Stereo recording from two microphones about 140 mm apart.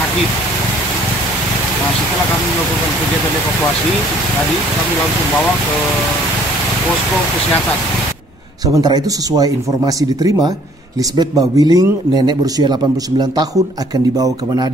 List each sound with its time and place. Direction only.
8.7 s speech: 30° right (ahead or behind)